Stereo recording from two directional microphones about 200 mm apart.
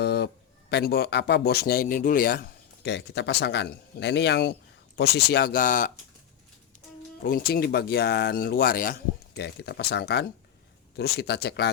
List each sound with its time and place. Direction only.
0.0 s a sound: 55° left (ahead or behind)
0.7 s a man's voice: 55° left (ahead or behind)
7.2 s a man's voice: 50° left (ahead or behind)